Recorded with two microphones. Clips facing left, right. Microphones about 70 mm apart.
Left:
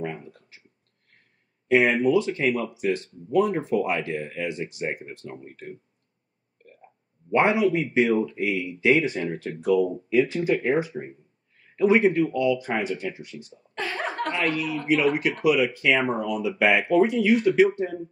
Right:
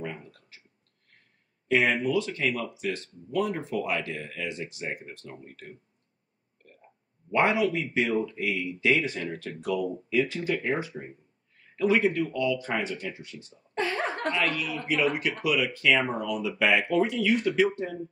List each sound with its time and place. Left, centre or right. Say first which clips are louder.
0.0 s a sound: left 5 dB; left
1.7 s speech: left 5 dB; left
7.2 s speech: left 3 dB; left
13.7 s chuckle: even; right
14.3 s a man's voice: left 3 dB; left; by 16.4 s centre
16.9 s speech: left 5 dB; left